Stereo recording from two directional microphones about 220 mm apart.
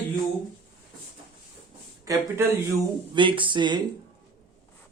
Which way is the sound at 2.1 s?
15° right (ahead or behind).